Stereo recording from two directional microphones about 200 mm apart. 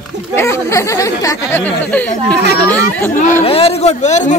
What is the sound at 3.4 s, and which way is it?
Speech, 30° left (ahead or behind).